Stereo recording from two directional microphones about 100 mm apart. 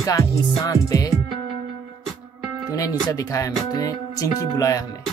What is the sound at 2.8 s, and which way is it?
Music, 35° left (ahead or behind).